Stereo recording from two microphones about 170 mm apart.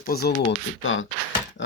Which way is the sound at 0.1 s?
65° left (ahead or behind).